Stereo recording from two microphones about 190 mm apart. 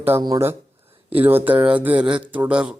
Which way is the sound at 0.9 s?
30° right (ahead or behind).